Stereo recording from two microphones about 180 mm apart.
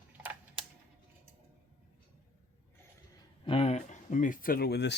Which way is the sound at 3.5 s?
35° left (ahead or behind).